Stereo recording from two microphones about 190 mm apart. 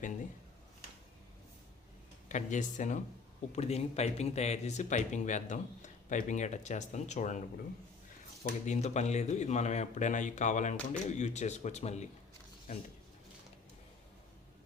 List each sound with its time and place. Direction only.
2.3 s speech: 40° left (ahead or behind)
8.4 s speech: 40° left (ahead or behind)